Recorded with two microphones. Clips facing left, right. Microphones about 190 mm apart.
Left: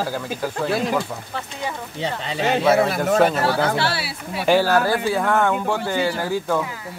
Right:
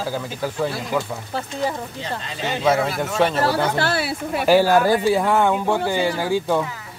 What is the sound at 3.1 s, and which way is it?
Speech, 5° left (ahead or behind).